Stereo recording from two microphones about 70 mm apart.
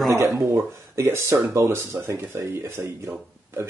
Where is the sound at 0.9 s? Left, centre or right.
Right.